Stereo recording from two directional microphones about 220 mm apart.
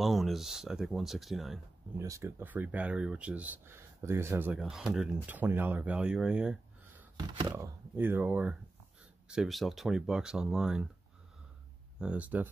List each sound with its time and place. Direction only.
0.0 s speech: centre (ahead or behind)
2.0 s speech: 15° right (ahead or behind)
7.2 s speech: 15° right (ahead or behind)
12.0 s speech: 5° right (ahead or behind)